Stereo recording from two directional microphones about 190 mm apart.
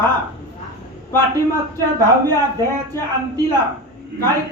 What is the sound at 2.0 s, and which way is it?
Speech, 15° left (ahead or behind).